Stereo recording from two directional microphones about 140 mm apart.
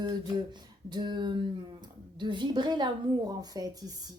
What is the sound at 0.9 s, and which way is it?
A woman's voice, 30° right (ahead or behind).